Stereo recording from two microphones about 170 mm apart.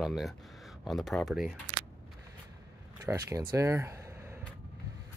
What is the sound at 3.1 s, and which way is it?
Speech, 20° right (ahead or behind).